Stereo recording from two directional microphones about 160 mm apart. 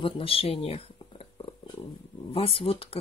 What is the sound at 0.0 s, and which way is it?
Speech, 35° left (ahead or behind).